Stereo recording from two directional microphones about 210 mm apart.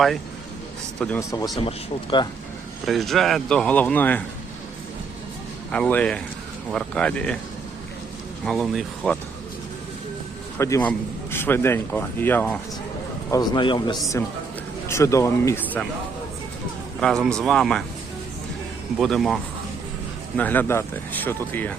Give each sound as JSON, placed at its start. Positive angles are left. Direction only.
{"t": 0.9, "sound": "a man's voice", "side_deg": 5}
{"t": 1.6, "sound": "a man's voice", "side_deg": 25}
{"t": 2.8, "sound": "speech", "side_deg": 0}
{"t": 5.7, "sound": "speech", "side_deg": 5}
{"t": 8.4, "sound": "speech", "side_deg": 0}
{"t": 10.6, "sound": "a man's voice", "side_deg": 15}
{"t": 13.3, "sound": "a man's voice", "side_deg": 20}
{"t": 17.0, "sound": "speech", "side_deg": 5}
{"t": 18.9, "sound": "a man's voice", "side_deg": 0}